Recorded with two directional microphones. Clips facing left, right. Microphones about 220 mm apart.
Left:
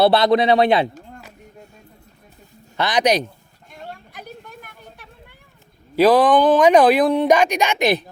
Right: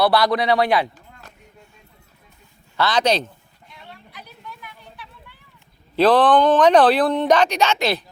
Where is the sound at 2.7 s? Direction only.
15° left (ahead or behind).